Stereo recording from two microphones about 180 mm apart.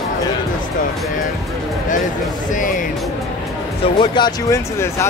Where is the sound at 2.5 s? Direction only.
45° left (ahead or behind).